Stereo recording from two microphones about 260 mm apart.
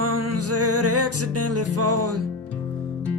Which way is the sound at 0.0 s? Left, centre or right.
Right.